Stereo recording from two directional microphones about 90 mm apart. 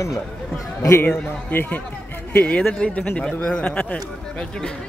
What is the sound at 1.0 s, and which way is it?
A man's voice, 20° left (ahead or behind).